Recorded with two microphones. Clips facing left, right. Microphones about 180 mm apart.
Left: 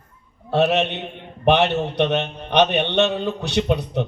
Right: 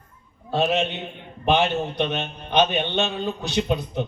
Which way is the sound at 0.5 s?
70° left (ahead or behind).